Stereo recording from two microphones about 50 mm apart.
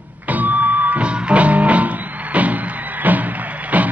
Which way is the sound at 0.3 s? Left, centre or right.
Right.